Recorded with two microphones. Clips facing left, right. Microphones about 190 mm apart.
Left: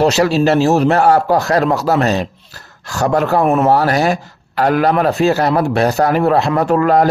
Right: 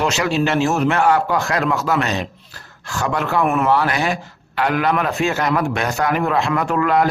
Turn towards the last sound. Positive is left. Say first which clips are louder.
# left 5 dB
turn(degrees=35)  # may be behind; listen again after turning